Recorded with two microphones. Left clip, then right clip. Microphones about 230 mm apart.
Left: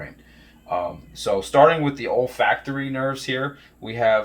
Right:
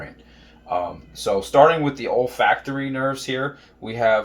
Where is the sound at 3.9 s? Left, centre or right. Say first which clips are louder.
Even; left.